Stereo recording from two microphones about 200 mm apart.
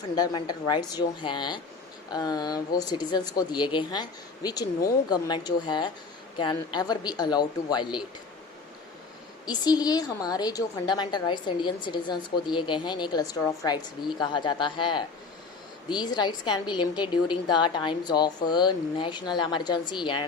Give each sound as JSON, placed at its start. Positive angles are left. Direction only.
{"t": 0.2, "sound": "a woman's voice", "side_deg": 20}
{"t": 9.5, "sound": "a woman's voice", "side_deg": 20}